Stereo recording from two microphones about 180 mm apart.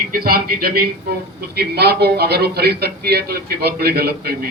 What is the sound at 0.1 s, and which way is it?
A man's voice, 55° right (ahead or behind).